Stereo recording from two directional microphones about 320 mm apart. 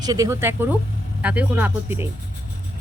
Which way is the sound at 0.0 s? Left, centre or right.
Centre.